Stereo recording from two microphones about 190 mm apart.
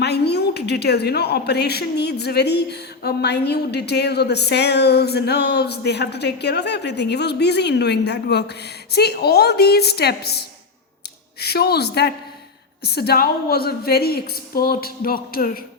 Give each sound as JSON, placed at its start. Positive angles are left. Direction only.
{"t": 0.0, "sound": "a woman's voice", "side_deg": 60}